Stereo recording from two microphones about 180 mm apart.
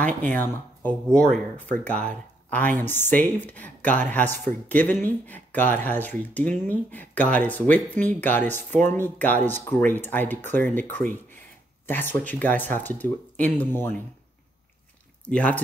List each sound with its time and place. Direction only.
0.0 s speech: 10° left (ahead or behind)
15.2 s speech: 5° left (ahead or behind)